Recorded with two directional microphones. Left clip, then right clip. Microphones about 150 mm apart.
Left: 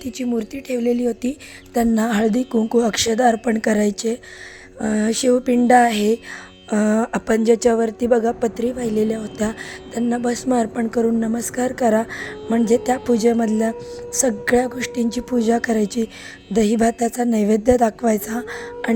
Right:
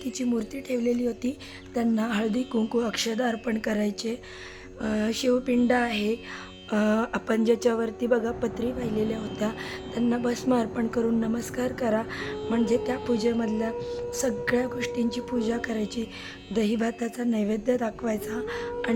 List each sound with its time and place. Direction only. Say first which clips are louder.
0.0 s a woman's voice: left 5 dB; 30° left (ahead or behind)
2.5 s speech: left 7 dB; 5° left (ahead or behind)
2.7 s a woman's voice: left 10 dB; 40° left (ahead or behind)